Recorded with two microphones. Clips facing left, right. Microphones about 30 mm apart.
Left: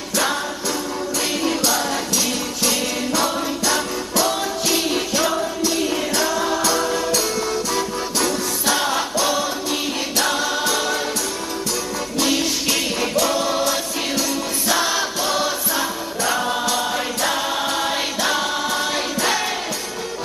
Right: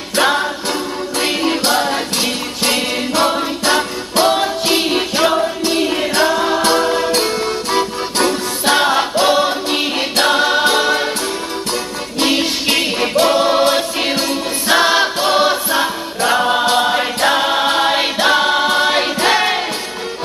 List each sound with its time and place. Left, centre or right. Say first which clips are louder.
0.2 s music: right 7 dB; right
12.2 s music: right 5 dB; right
14.7 s choir: right 8 dB; right